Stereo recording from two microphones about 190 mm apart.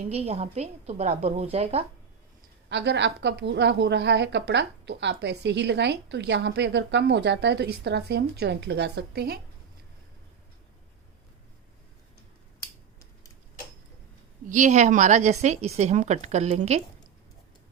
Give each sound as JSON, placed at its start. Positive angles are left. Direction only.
{"t": 0.1, "sound": "a woman's voice", "side_deg": -30}
{"t": 2.6, "sound": "a woman's voice", "side_deg": -65}
{"t": 14.5, "sound": "a woman's voice", "side_deg": -40}